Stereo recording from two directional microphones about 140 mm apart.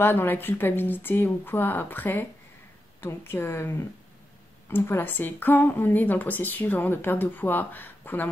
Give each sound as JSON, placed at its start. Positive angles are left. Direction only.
{"t": 0.0, "sound": "a woman's voice", "side_deg": 15}